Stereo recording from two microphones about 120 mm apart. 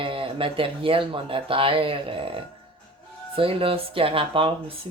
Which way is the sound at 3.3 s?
50° right (ahead or behind).